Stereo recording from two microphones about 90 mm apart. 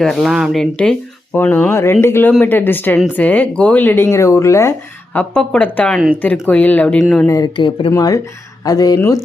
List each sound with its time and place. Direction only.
0.0 s speech: centre (ahead or behind)
0.5 s speech: 5° left (ahead or behind); by 4.7 s 35° left (ahead or behind)
5.1 s speech: 10° left (ahead or behind)
7.0 s speech: 5° left (ahead or behind)
7.3 s speech: 40° left (ahead or behind)
7.5 s speech: 65° left (ahead or behind)
7.9 s speech: 40° left (ahead or behind)